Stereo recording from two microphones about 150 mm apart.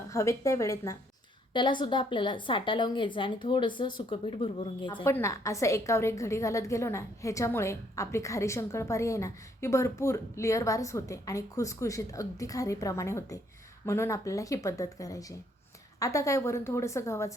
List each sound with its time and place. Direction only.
0.1 s a woman's voice: 20° left (ahead or behind)
1.5 s a woman's voice: 30° left (ahead or behind)
5.0 s a woman's voice: 20° left (ahead or behind)